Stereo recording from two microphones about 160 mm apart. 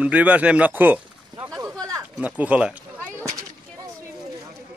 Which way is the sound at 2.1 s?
10° right (ahead or behind).